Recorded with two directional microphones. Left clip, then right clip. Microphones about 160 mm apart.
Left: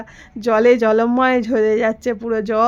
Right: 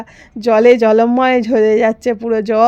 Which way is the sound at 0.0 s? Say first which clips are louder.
Right 4 dB; 30° right (ahead or behind).